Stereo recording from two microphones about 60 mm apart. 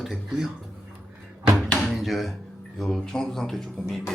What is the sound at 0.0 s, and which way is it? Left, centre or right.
Speech, centre.